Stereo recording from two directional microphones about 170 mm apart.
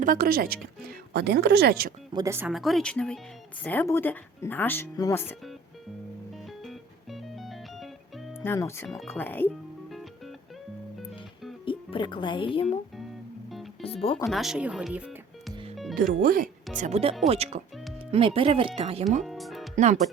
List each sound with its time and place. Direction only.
0.0 s speech: 55° right (ahead or behind)
2.1 s speech: 15° right (ahead or behind)
2.5 s speech: centre (ahead or behind)
6.7 s music: centre (ahead or behind)
8.4 s speech: 15° left (ahead or behind)
11.6 s speech: 30° left (ahead or behind)
13.8 s speech: 35° left (ahead or behind)
14.3 s speech: centre (ahead or behind)
15.7 s music: centre (ahead or behind)
16.2 s speech: 55° right (ahead or behind)
16.7 s speech: 40° right (ahead or behind)
19.2 s music: centre (ahead or behind)
19.7 s speech: 45° right (ahead or behind)